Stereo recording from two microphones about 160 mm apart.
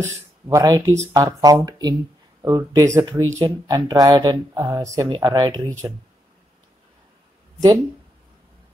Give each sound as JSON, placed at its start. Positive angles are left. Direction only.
{"t": 0.5, "sound": "speech", "side_deg": -25}